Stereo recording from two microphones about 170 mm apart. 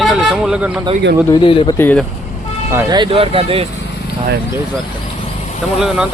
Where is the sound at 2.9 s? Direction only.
30° right (ahead or behind).